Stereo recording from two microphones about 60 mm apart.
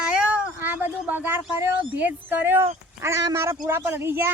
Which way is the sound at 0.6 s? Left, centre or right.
Right.